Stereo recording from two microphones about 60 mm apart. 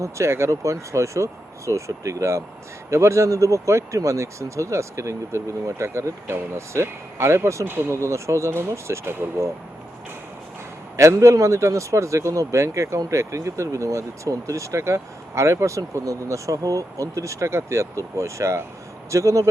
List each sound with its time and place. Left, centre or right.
0.0 s speech: right
10.9 s speech: right